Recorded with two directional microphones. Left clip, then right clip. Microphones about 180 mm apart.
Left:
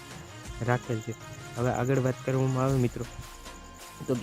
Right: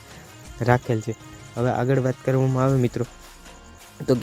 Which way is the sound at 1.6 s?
20° right (ahead or behind).